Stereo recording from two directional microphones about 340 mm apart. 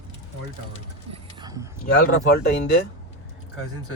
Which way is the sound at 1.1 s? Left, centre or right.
Centre.